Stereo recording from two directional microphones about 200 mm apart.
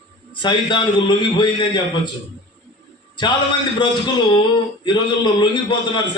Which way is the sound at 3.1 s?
25° left (ahead or behind).